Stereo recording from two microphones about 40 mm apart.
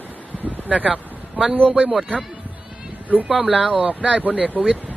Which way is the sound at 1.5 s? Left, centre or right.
Left.